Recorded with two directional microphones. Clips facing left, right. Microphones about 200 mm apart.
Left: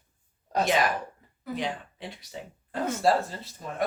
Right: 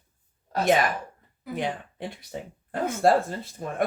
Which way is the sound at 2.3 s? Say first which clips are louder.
Right 1 dB; 50° right (ahead or behind).